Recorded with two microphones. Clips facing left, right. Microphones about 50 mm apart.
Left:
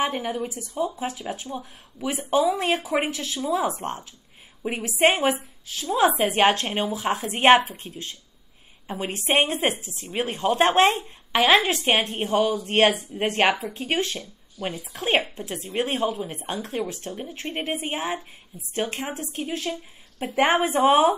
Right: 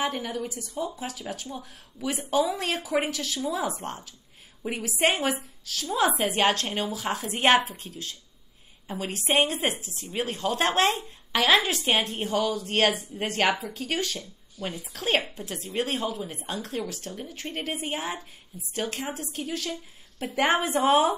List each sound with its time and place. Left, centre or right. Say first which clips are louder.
0.0 s speech: left 3 dB; left
2.3 s speech: left 4 dB; left